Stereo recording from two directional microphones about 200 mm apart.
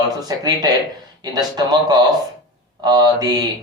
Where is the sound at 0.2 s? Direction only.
20° right (ahead or behind).